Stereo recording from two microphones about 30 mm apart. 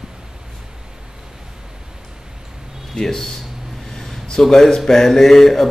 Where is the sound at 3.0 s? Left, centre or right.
Centre.